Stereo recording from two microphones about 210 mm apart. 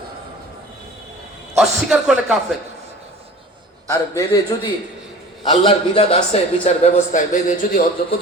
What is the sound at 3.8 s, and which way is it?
Speech, 15° left (ahead or behind).